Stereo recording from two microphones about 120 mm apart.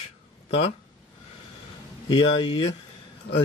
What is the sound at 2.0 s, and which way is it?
Speech, 45° left (ahead or behind).